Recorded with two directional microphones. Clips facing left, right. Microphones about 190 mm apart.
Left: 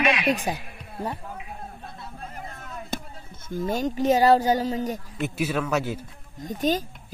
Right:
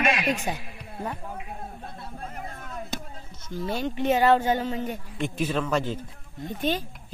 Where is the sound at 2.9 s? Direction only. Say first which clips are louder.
Left 2 dB; 55° left (ahead or behind).